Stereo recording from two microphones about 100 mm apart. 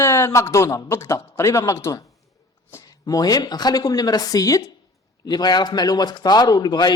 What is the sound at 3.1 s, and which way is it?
A man's voice, 40° left (ahead or behind).